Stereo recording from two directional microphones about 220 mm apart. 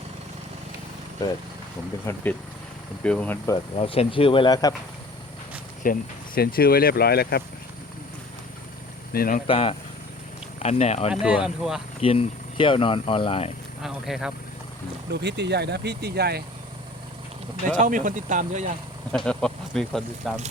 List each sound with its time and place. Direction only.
2.1 s speech: 10° left (ahead or behind)
3.8 s speech: 25° left (ahead or behind)
5.8 s speech: 40° left (ahead or behind)
9.1 s speech: 40° left (ahead or behind)
9.5 s speech: 25° left (ahead or behind)
11.1 s speech: 5° right (ahead or behind)
11.9 s speech: 25° left (ahead or behind)
13.8 s speech: centre (ahead or behind)
15.1 s speech: 50° right (ahead or behind)
17.7 s speech: 35° right (ahead or behind)
19.1 s speech: 5° left (ahead or behind)